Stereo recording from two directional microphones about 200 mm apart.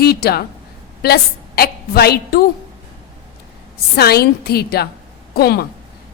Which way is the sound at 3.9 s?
50° left (ahead or behind).